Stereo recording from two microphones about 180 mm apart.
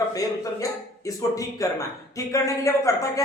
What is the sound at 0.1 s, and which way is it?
Speech, 20° left (ahead or behind).